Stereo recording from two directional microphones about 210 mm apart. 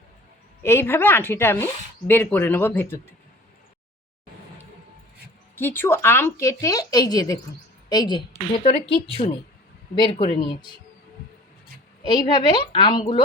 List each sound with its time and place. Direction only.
0.6 s speech: 10° left (ahead or behind)
5.5 s a woman's voice: 10° left (ahead or behind)
12.0 s a woman's voice: 20° left (ahead or behind)